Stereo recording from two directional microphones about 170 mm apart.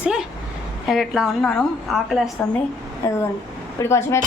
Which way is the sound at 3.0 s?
15° left (ahead or behind).